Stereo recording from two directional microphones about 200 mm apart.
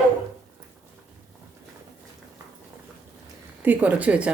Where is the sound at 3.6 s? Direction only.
10° right (ahead or behind).